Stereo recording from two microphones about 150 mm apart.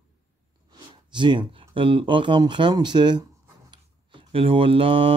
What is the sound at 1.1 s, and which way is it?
Speech, 30° right (ahead or behind).